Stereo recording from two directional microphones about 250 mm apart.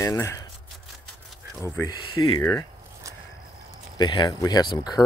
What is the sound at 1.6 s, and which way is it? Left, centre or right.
Speech, centre.